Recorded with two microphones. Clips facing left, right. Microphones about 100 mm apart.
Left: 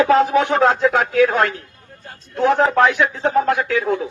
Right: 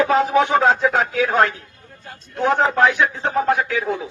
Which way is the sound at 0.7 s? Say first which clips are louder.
Left 3 dB; 65° left (ahead or behind).